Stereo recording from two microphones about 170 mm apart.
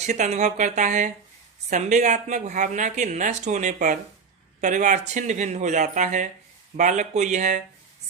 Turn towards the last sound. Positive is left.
turn(degrees=-45)  # may be behind; listen again after turning